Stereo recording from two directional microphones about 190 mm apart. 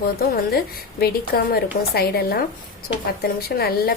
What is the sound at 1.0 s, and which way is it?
A woman's voice, 55° left (ahead or behind).